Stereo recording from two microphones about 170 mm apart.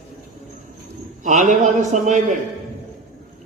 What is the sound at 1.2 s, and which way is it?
A man's voice, 45° right (ahead or behind).